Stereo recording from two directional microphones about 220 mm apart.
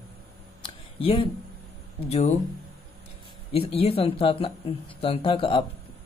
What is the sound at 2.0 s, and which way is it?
Speech, 30° left (ahead or behind).